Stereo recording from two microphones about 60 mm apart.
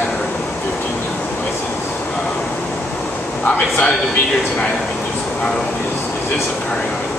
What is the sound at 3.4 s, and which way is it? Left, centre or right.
Speech, left.